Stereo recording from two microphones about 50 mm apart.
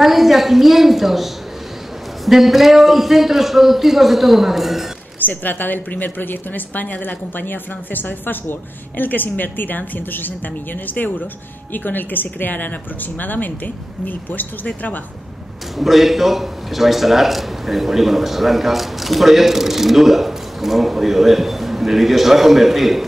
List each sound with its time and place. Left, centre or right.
0.0 s a man's voice: centre
5.2 s a woman's voice: left
15.8 s a man's voice: centre